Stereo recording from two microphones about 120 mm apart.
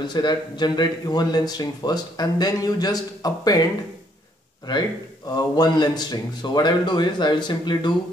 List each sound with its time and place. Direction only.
0.0 s speech: 40° left (ahead or behind)
5.3 s speech: 35° left (ahead or behind)